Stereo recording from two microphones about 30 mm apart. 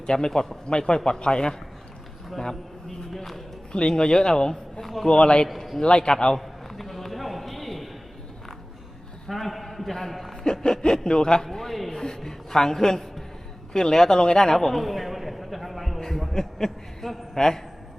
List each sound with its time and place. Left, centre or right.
0.0 s a woman's voice: left
0.7 s speech: left
3.7 s speech: left
4.8 s a sound: centre
5.0 s a man's voice: left
5.5 s a man's voice: centre
5.8 s speech: left
6.4 s a sound: centre
9.3 s a man's voice: centre
10.4 s a woman's voice: left; by 16.0 s centre
16.0 s a sound: centre
16.3 s a woman's voice: centre